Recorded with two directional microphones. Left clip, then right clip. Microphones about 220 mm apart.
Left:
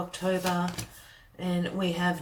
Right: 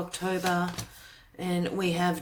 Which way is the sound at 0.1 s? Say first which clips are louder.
Right 1 dB; 45° right (ahead or behind).